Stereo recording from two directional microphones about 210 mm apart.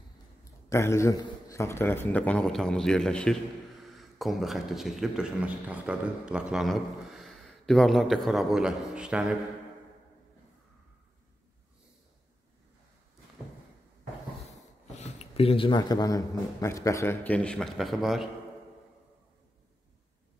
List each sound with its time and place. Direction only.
0.7 s a man's voice: 15° left (ahead or behind); by 9.3 s 5° right (ahead or behind)
14.5 s speech: 35° left (ahead or behind); by 18.3 s centre (ahead or behind)